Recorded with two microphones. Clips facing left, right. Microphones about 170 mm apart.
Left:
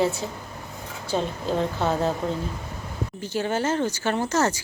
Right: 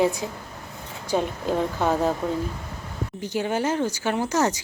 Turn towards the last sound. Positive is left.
turn(degrees=-15)  # may be behind; listen again after turning